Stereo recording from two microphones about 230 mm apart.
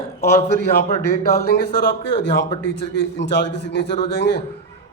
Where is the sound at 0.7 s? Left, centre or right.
Left.